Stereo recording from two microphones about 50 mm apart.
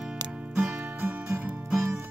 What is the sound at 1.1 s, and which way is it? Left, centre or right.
Music, right.